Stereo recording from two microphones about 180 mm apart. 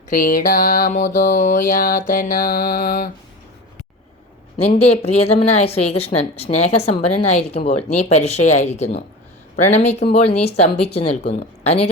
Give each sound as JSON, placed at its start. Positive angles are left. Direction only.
{"t": 0.1, "sound": "music", "side_deg": 50}
{"t": 4.5, "sound": "a woman's voice", "side_deg": 35}